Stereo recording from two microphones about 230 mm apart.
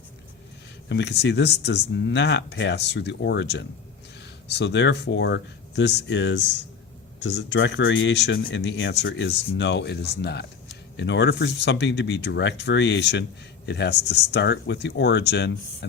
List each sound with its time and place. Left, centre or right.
0.9 s speech: left